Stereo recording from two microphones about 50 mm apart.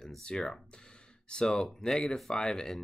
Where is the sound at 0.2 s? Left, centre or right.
Centre.